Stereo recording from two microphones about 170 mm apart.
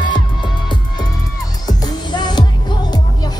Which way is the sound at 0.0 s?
25° left (ahead or behind).